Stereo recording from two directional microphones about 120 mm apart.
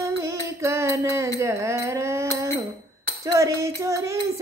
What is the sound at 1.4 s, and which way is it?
Music, 25° right (ahead or behind).